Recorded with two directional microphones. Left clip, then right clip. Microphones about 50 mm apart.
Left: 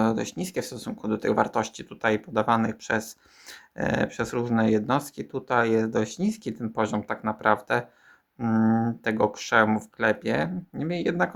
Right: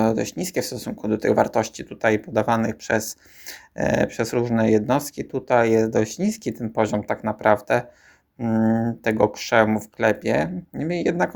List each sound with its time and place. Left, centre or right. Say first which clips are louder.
0.0 s speech: right 4 dB; right
8.4 s speech: right 2 dB; centre
9.0 s speech: right 6 dB; right